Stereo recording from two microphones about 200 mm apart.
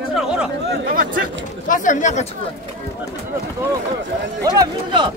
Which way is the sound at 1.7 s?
40° left (ahead or behind).